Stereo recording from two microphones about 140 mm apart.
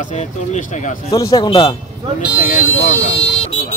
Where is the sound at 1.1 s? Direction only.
25° left (ahead or behind).